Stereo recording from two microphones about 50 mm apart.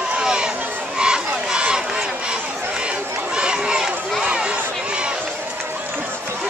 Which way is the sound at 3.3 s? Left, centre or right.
Centre.